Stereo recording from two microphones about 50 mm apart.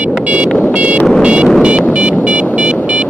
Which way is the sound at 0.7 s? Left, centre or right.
Right.